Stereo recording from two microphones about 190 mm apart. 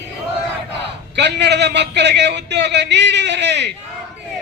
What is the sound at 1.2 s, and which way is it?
A man's voice, 65° right (ahead or behind).